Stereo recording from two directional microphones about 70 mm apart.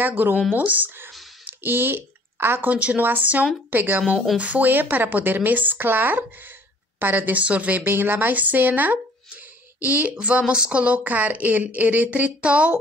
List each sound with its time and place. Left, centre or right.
0.0 s speech: right
1.4 s a sound: right
2.7 s speech: right